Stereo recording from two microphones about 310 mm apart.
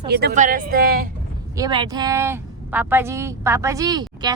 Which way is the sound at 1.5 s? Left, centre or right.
Centre.